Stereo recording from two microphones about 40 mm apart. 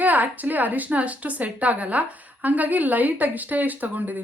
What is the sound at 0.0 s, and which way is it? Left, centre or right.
A woman's voice, right.